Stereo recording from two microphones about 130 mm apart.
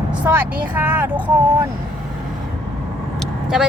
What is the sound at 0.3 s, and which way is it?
Speech, 15° right (ahead or behind).